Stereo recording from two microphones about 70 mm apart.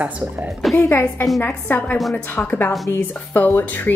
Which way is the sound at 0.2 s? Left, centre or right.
Centre.